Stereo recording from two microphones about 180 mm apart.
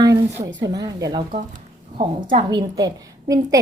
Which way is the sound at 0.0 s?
20° right (ahead or behind).